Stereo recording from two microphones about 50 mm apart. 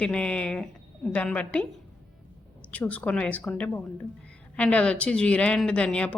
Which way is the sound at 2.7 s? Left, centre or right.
Left.